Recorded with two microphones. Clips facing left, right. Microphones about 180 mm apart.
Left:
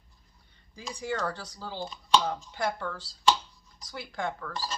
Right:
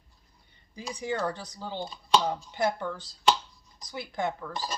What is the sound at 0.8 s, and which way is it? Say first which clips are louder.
Speech: right 2 dB; 15° right (ahead or behind).